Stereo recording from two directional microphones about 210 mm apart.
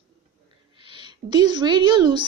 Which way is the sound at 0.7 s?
25° right (ahead or behind).